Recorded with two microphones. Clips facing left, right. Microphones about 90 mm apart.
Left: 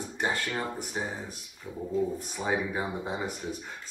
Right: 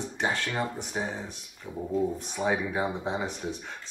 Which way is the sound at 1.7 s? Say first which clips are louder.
Right 2 dB; 15° right (ahead or behind).